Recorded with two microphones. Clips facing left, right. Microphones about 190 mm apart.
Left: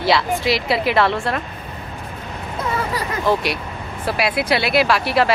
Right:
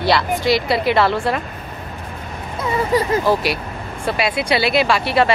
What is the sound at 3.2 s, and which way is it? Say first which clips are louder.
Speech: right 1 dB; centre (ahead or behind).